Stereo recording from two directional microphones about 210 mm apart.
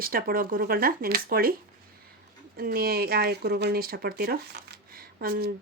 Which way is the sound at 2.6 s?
45° right (ahead or behind).